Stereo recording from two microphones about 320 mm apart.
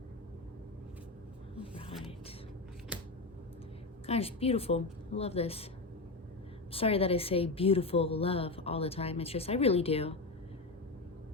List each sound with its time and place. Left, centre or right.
1.6 s a sound: centre
2.9 s scissors: centre
4.0 s a woman's voice: centre
6.7 s a woman's voice: centre